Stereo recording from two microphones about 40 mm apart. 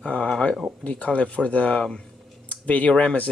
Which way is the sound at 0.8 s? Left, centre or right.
Left.